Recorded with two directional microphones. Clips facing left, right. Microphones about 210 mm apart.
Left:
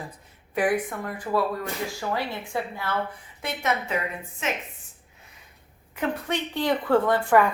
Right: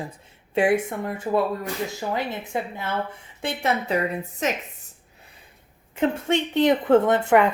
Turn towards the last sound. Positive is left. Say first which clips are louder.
# right 2 dB
turn(degrees=-20)  # may be behind; listen again after turning